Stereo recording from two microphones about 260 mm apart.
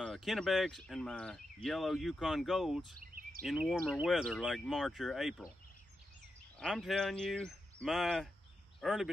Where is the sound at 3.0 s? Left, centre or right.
Right.